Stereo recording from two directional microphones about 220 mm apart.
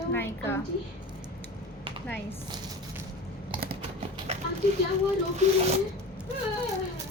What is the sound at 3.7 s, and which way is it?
Typing, 25° right (ahead or behind).